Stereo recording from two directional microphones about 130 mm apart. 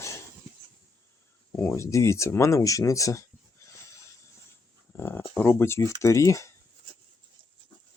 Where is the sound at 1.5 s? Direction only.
20° left (ahead or behind).